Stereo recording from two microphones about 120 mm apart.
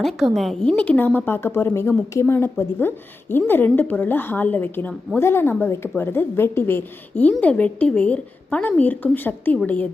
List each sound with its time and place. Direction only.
0.3 s a woman's voice: 5° left (ahead or behind)